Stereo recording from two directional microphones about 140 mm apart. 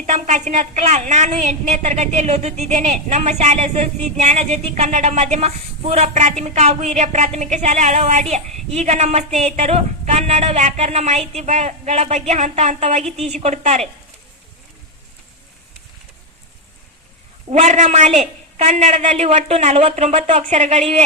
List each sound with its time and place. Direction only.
0.0 s a woman's voice: 55° right (ahead or behind)
17.5 s a woman's voice: 60° right (ahead or behind)